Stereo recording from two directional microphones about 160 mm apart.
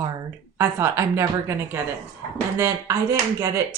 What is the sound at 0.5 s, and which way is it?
Speech, 20° right (ahead or behind).